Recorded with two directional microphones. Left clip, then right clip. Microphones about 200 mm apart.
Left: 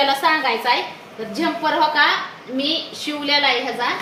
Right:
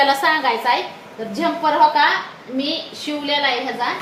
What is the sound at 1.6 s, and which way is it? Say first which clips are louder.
Speech: right 2 dB; centre (ahead or behind).